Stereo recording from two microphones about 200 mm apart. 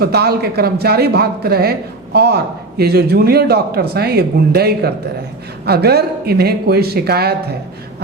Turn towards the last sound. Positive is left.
turn(degrees=-55)  # may be behind; listen again after turning